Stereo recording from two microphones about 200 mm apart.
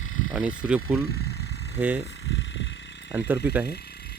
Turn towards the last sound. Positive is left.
turn(degrees=-10)  # may be behind; listen again after turning